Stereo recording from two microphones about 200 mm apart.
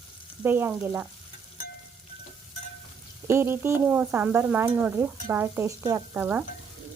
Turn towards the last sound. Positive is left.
turn(degrees=-10)  # may be behind; listen again after turning